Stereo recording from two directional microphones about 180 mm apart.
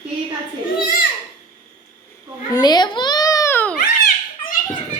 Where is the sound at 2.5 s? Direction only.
20° left (ahead or behind).